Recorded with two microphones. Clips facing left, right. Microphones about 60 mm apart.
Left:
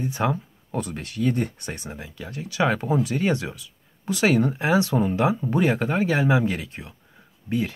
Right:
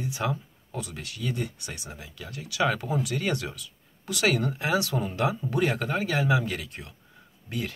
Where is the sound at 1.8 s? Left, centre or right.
Left.